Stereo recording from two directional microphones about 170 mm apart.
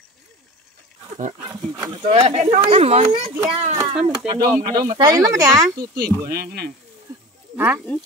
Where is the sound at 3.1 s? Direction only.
25° right (ahead or behind).